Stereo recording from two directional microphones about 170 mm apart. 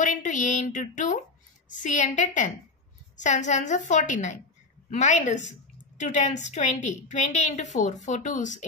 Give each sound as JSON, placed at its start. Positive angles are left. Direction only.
{"t": 0.0, "sound": "a woman's voice", "side_deg": 50}